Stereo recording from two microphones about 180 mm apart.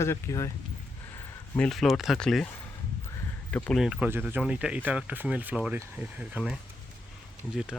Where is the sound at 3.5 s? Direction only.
5° left (ahead or behind).